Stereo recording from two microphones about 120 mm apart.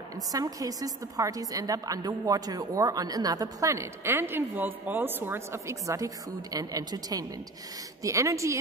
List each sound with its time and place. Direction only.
0.3 s a woman's voice: 30° right (ahead or behind)